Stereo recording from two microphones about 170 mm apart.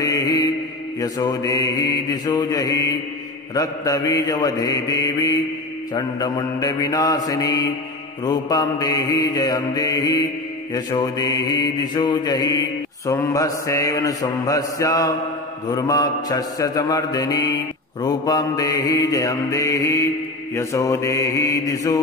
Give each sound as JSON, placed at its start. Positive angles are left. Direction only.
{"t": 0.0, "sound": "mantra", "side_deg": 20}